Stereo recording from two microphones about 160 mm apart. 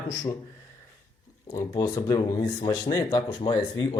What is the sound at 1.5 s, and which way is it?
Speech, 20° left (ahead or behind).